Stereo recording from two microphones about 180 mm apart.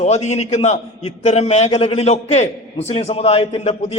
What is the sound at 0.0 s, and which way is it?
A man's voice, 40° left (ahead or behind).